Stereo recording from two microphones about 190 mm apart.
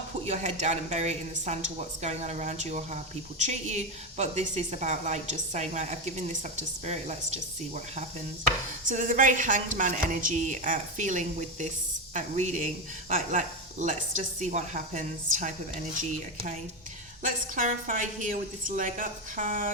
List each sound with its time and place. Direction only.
0.3 s a woman's voice: 40° right (ahead or behind)
8.9 s a woman's voice: 45° right (ahead or behind)
17.2 s a woman's voice: 45° right (ahead or behind)